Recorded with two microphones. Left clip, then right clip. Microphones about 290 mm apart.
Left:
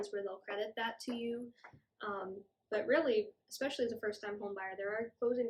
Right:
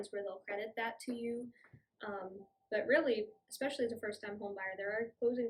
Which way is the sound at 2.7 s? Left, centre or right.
Centre.